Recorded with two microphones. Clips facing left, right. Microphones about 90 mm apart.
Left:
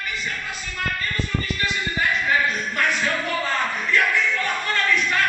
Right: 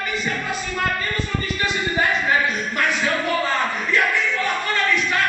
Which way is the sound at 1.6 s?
30° right (ahead or behind).